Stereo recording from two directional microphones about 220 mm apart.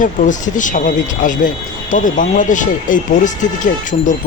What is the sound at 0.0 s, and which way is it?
Speech, 35° left (ahead or behind).